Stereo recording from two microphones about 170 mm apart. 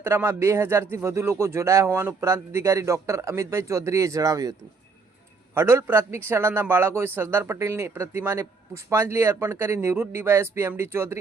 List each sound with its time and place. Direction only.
0.0 s speech: 15° right (ahead or behind)
5.5 s speech: 15° right (ahead or behind)